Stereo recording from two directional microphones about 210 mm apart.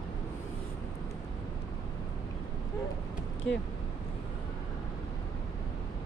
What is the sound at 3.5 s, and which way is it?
Speech, 60° left (ahead or behind).